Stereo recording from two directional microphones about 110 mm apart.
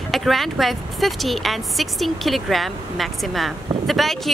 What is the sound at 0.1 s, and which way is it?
Speech, centre (ahead or behind).